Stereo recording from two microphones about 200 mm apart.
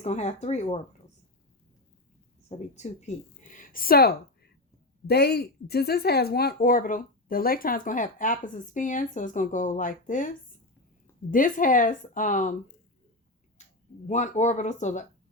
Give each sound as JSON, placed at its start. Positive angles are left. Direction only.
{"t": 0.0, "sound": "speech", "side_deg": 35}
{"t": 2.5, "sound": "a woman's voice", "side_deg": 35}
{"t": 14.1, "sound": "speech", "side_deg": 35}